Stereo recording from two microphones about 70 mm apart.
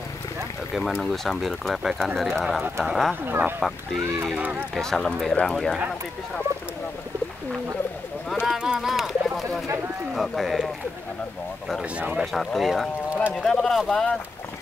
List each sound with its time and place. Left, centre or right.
0.7 s speech: centre
3.3 s speech: right
4.7 s speech: centre
8.5 s speech: centre
12.2 s speech: centre